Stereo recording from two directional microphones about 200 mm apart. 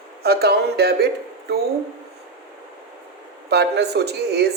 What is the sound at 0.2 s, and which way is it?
Speech, 55° right (ahead or behind).